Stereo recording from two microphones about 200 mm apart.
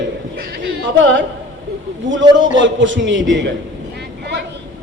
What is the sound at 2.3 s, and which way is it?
A man's voice, 70° right (ahead or behind).